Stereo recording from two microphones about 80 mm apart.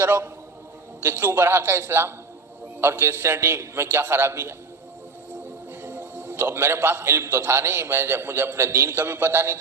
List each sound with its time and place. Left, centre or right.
0.0 s a man's voice: right
5.8 s a man's voice: right